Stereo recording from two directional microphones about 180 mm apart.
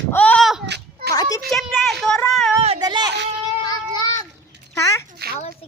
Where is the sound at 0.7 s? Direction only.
65° right (ahead or behind).